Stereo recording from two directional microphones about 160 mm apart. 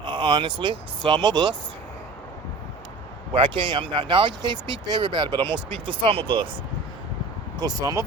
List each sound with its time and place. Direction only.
0.0 s speech: 30° right (ahead or behind)
3.3 s speech: 30° right (ahead or behind)
7.6 s speech: 25° right (ahead or behind)